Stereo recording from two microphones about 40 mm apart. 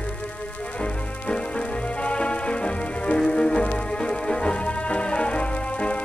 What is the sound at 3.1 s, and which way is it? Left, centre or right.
Music, left.